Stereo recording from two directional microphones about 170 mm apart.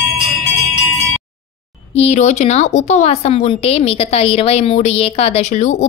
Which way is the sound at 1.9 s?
40° left (ahead or behind).